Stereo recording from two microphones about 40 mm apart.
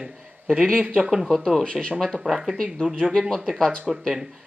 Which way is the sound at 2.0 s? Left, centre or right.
Centre.